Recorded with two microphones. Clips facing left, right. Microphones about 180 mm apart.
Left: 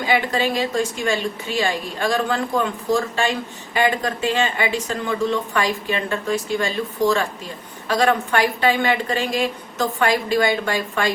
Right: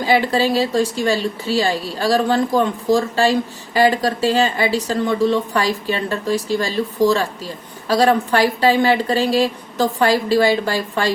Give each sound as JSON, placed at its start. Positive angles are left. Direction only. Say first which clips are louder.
{"t": 0.0, "sound": "speech", "louder": "right 4 dB", "side_deg": -35}